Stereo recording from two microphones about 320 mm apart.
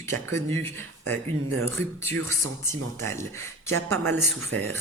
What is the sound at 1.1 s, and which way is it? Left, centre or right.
Speech, right.